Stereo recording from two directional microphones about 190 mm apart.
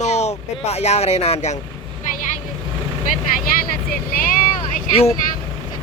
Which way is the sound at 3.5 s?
50° left (ahead or behind).